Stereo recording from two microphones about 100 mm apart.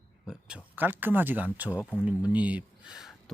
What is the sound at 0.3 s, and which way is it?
Speech, 10° right (ahead or behind).